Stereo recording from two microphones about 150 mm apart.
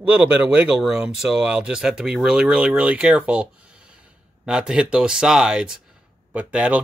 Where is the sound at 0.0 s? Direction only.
10° right (ahead or behind).